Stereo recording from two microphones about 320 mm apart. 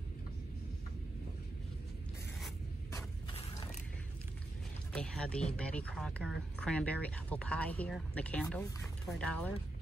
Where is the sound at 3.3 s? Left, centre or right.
Centre.